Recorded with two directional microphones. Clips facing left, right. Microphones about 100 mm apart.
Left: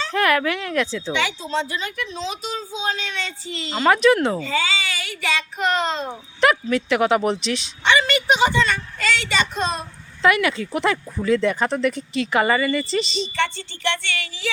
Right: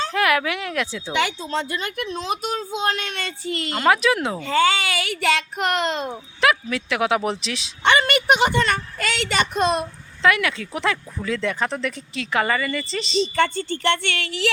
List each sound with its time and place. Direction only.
0.1 s speech: 5° right (ahead or behind)
1.1 s a woman's voice: 50° right (ahead or behind)
3.8 s speech: 5° right (ahead or behind)
4.4 s a woman's voice: 55° right (ahead or behind)
6.4 s speech: centre (ahead or behind)
7.9 s a woman's voice: 55° right (ahead or behind)
10.2 s speech: 5° left (ahead or behind)
13.2 s a woman's voice: 45° right (ahead or behind); by 14.5 s 70° right (ahead or behind)